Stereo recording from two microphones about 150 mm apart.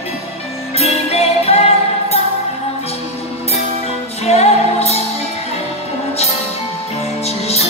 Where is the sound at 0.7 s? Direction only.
45° left (ahead or behind).